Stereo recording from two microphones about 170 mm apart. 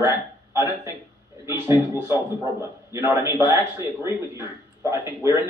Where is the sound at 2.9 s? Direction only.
10° right (ahead or behind).